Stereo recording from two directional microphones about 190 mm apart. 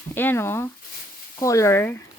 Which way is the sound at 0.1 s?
10° left (ahead or behind).